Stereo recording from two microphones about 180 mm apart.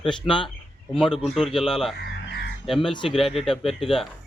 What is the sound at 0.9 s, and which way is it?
Speech, 5° left (ahead or behind).